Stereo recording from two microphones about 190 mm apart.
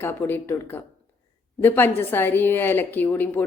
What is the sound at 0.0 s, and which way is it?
A woman's voice, 10° left (ahead or behind).